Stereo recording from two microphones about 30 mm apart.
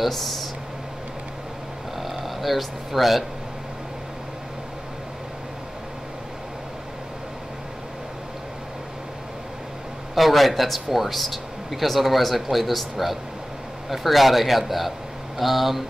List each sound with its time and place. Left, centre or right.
0.1 s speech: centre
2.0 s speech: centre
10.1 s speech: centre